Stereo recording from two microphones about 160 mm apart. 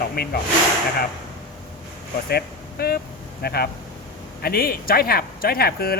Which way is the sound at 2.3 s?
75° left (ahead or behind).